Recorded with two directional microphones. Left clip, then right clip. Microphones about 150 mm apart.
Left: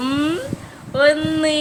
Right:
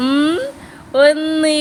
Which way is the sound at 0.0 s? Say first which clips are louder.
Right 5 dB; 50° right (ahead or behind).